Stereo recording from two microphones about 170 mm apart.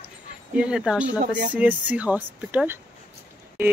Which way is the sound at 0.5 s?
5° right (ahead or behind).